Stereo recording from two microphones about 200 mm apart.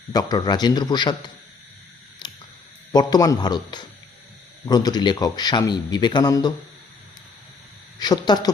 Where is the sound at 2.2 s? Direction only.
20° left (ahead or behind).